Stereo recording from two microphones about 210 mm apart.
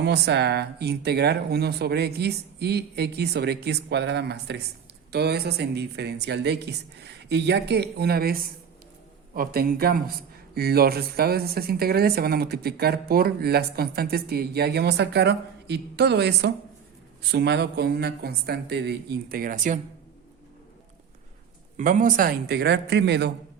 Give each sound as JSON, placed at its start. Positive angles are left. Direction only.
{"t": 0.0, "sound": "a man's voice", "side_deg": -55}
{"t": 21.8, "sound": "a man's voice", "side_deg": -40}